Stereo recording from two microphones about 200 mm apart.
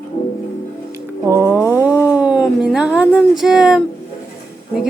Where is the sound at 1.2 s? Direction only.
15° right (ahead or behind).